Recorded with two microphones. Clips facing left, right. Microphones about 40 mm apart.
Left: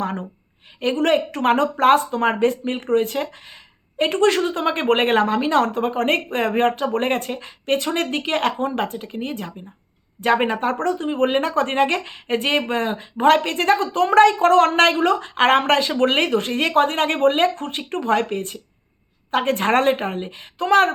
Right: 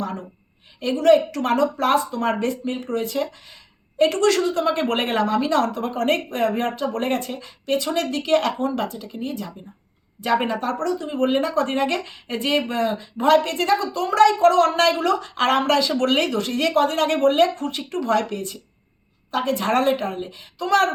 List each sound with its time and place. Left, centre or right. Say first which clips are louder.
0.8 s speech: right 2 dB; left